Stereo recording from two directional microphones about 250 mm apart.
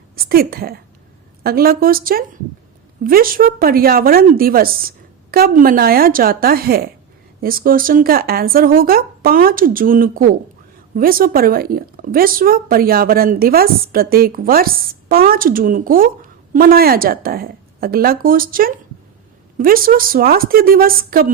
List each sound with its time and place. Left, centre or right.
0.3 s speech: right